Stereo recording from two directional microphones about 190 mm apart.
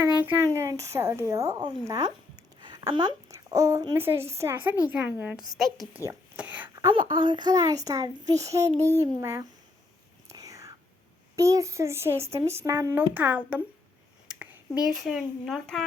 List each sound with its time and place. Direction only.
0.1 s speech: 10° right (ahead or behind)
10.2 s whispering: 20° right (ahead or behind)
11.3 s speech: 15° right (ahead or behind)
14.8 s speech: centre (ahead or behind)